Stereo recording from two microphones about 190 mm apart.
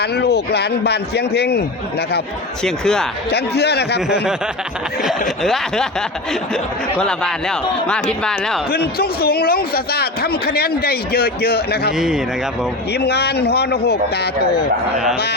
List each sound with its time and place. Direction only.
0.0 s a man's voice: 60° left (ahead or behind)
2.6 s speech: 5° left (ahead or behind)
3.2 s a man's voice: 60° left (ahead or behind)
5.4 s speech: centre (ahead or behind)
8.7 s a man's voice: 55° left (ahead or behind)
11.9 s speech: 5° right (ahead or behind)
12.9 s a man's voice: 60° left (ahead or behind)